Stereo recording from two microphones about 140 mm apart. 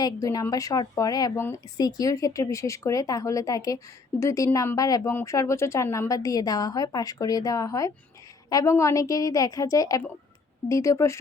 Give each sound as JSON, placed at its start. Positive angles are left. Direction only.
{"t": 0.0, "sound": "a woman's voice", "side_deg": 25}